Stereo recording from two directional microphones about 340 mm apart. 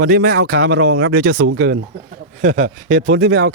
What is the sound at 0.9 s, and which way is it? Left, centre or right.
Speech, right.